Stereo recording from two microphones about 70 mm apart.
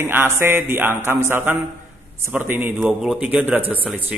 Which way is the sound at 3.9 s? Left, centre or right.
Centre.